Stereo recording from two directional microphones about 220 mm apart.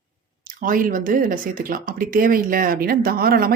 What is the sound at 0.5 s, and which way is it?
Speech, 40° right (ahead or behind).